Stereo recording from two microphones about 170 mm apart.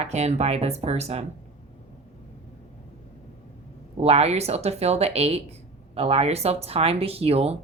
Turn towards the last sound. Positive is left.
turn(degrees=-35)  # may be behind; listen again after turning